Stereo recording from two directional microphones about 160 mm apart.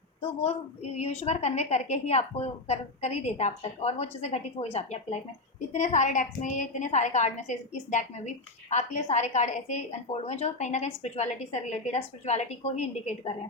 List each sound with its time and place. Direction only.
0.9 s a woman's voice: 40° left (ahead or behind)